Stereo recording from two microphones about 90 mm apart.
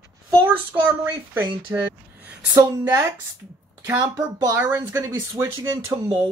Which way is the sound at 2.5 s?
30° right (ahead or behind).